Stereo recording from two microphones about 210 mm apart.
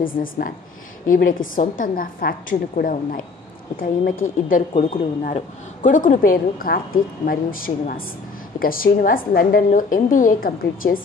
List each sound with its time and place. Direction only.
0.0 s speech: 40° left (ahead or behind)